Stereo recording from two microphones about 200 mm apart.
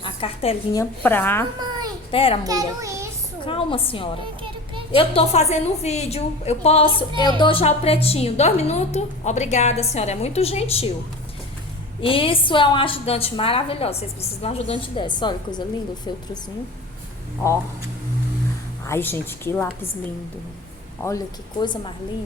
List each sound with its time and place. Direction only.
0.0 s a woman's voice: 25° left (ahead or behind); by 1.5 s 10° left (ahead or behind)
2.0 s a woman's voice: 25° left (ahead or behind)
2.4 s a child's voice: 20° right (ahead or behind)
3.4 s a woman's voice: 25° left (ahead or behind)
11.9 s a woman's voice: 25° left (ahead or behind)
18.9 s a woman's voice: 10° left (ahead or behind)
21.0 s a woman's voice: 15° left (ahead or behind)